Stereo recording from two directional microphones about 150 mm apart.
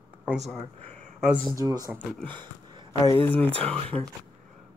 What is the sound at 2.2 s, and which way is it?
Speech, 30° right (ahead or behind).